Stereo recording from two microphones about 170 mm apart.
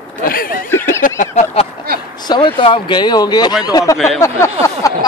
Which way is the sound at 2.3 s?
30° left (ahead or behind).